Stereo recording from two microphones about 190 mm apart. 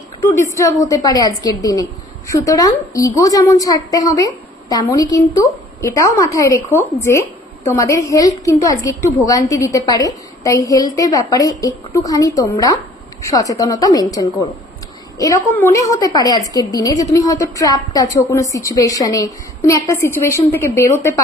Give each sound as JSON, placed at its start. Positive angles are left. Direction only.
{"t": 0.4, "sound": "a woman's voice", "side_deg": 15}